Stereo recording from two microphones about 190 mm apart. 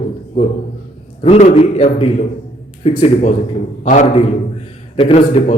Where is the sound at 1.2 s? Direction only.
35° left (ahead or behind).